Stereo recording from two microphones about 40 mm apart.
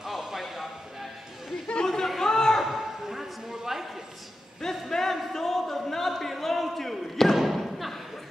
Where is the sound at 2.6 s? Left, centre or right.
Centre.